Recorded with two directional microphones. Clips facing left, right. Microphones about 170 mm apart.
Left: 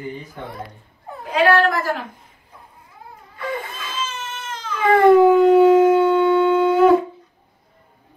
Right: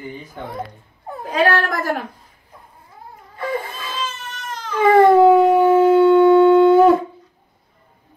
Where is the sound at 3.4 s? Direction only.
40° right (ahead or behind).